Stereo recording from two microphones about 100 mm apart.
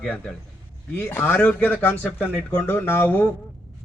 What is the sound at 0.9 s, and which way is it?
A man's voice, 20° left (ahead or behind).